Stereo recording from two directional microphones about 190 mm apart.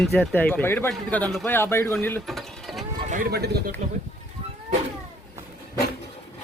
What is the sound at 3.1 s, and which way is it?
Speech, 55° right (ahead or behind).